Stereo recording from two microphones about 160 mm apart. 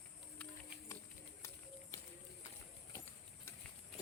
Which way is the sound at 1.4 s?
20° left (ahead or behind).